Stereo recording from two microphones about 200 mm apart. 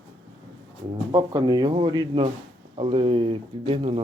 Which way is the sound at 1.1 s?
20° right (ahead or behind).